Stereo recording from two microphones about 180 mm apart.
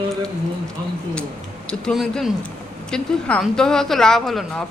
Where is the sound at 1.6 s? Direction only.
Centre (ahead or behind).